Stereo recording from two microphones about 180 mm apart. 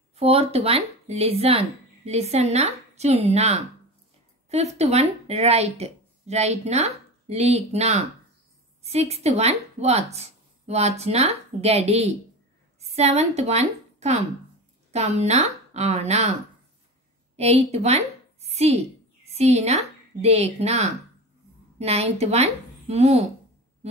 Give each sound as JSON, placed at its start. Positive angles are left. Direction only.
{"t": 0.1, "sound": "a woman's voice", "side_deg": -35}
{"t": 17.4, "sound": "a woman's voice", "side_deg": -35}